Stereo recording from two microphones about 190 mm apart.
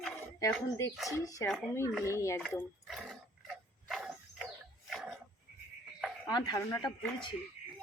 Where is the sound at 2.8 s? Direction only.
Centre (ahead or behind).